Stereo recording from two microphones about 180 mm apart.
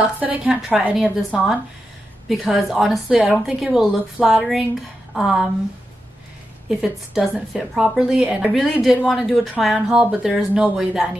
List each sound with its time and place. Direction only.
0.2 s a woman's voice: 10° right (ahead or behind)
6.7 s a woman's voice: centre (ahead or behind)